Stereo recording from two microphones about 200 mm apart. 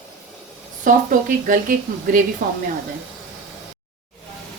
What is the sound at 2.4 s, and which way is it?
Speech, 50° right (ahead or behind).